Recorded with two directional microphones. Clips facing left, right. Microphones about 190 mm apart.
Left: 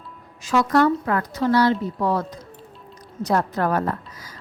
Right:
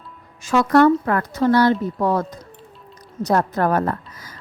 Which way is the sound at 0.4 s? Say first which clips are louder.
Right 4 dB; 55° right (ahead or behind).